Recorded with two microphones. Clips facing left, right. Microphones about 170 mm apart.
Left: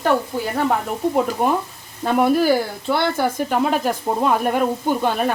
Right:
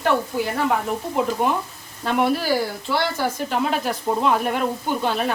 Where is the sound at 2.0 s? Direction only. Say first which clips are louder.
Left 4 dB; 45° left (ahead or behind).